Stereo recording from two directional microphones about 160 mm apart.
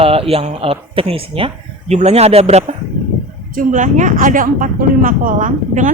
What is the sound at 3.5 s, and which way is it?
Speech, 50° right (ahead or behind).